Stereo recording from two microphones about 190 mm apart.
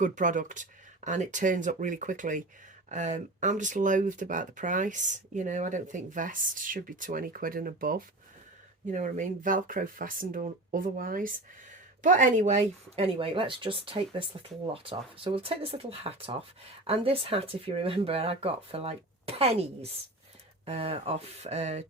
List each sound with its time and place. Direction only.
0.0 s speech: 40° right (ahead or behind)